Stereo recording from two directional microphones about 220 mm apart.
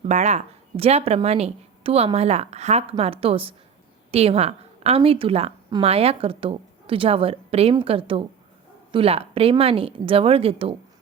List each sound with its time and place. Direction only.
0.0 s a woman's voice: 30° right (ahead or behind)